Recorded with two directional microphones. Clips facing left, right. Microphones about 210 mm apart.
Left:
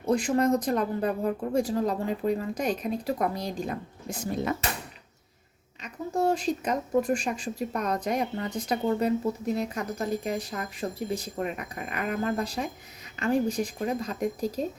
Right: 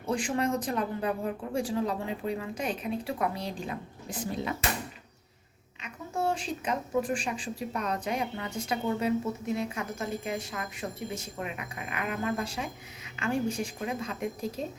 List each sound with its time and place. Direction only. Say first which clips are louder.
0.0 s speech: left 5 dB; 40° left (ahead or behind)
5.8 s speech: left 5 dB; 40° left (ahead or behind)